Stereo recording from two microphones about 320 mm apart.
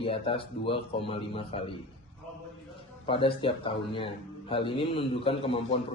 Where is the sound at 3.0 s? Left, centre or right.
Centre.